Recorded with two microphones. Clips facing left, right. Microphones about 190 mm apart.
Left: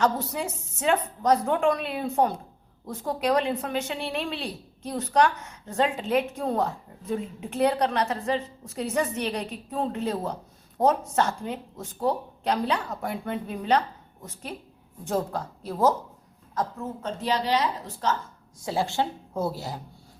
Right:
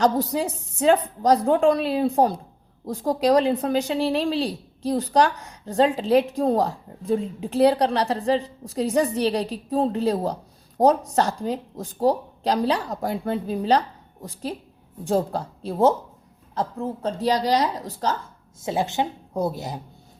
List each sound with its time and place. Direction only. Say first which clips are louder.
0.0 s a woman's voice: right 5 dB; 35° right (ahead or behind)
18.6 s a woman's voice: right 2 dB; 20° right (ahead or behind)